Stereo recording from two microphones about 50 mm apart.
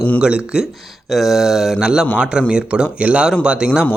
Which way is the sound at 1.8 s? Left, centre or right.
Centre.